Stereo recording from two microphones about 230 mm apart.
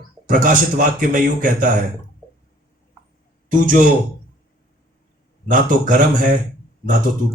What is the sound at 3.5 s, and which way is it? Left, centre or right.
Speech, right.